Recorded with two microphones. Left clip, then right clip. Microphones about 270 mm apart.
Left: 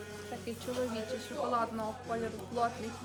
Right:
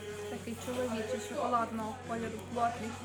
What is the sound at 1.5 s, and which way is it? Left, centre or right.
Speech, centre.